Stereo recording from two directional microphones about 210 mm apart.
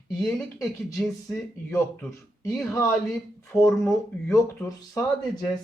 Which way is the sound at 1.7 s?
15° left (ahead or behind).